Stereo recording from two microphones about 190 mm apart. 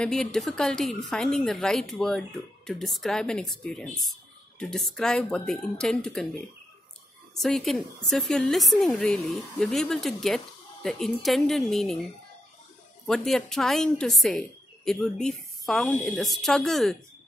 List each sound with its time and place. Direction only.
0.0 s a woman's voice: 5° left (ahead or behind)
7.3 s a woman's voice: centre (ahead or behind)
13.0 s a woman's voice: centre (ahead or behind)